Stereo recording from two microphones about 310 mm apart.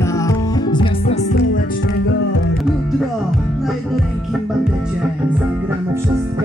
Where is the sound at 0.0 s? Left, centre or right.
Centre.